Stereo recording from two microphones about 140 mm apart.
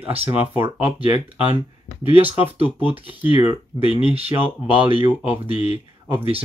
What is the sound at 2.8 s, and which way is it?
Speech, 35° left (ahead or behind).